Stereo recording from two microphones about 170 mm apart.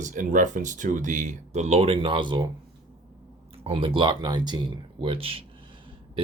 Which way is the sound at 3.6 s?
30° right (ahead or behind).